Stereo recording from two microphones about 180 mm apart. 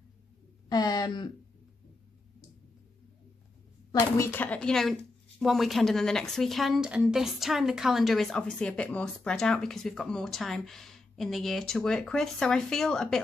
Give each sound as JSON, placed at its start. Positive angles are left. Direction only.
{"t": 0.7, "sound": "speech", "side_deg": 20}
{"t": 4.2, "sound": "speech", "side_deg": 10}